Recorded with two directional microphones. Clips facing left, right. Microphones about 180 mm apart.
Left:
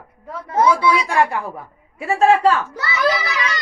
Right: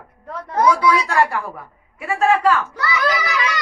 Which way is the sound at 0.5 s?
25° left (ahead or behind).